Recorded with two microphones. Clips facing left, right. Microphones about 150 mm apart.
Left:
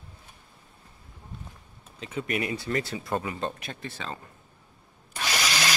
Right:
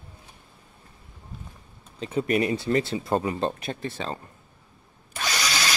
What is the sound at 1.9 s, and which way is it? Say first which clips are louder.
Speech: right 7 dB; 35° right (ahead or behind).